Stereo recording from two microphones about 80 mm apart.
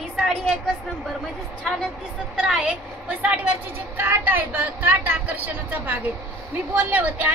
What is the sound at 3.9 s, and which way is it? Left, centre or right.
Speech, right.